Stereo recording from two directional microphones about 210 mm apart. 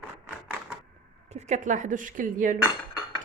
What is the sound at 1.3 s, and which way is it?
Speech, 35° right (ahead or behind).